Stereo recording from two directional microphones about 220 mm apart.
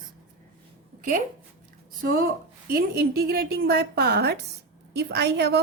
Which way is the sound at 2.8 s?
45° right (ahead or behind).